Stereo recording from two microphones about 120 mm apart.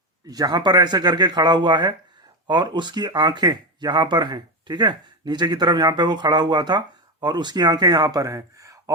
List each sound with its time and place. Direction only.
0.3 s speech: 35° right (ahead or behind)